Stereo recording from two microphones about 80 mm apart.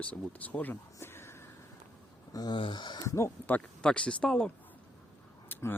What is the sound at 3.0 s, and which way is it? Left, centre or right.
Speech, left.